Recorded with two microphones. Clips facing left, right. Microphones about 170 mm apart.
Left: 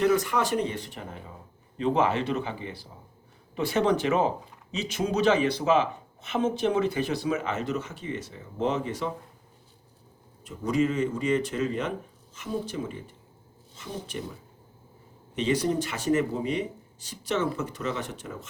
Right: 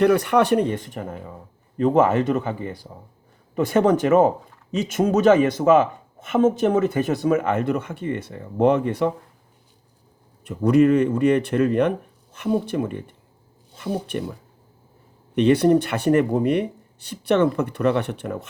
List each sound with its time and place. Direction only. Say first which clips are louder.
0.0 s speech: right 7 dB; 65° right (ahead or behind)
10.4 s speech: right 9 dB; 60° right (ahead or behind)
15.4 s speech: right 10 dB; 60° right (ahead or behind)